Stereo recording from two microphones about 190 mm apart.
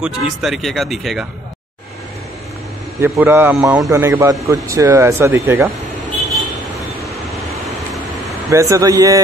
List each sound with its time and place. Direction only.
0.0 s speech: centre (ahead or behind)
3.0 s a man's voice: 10° right (ahead or behind)
8.5 s a man's voice: 15° right (ahead or behind)